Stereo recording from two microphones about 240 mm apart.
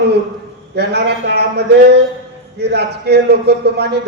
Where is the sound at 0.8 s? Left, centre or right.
Right.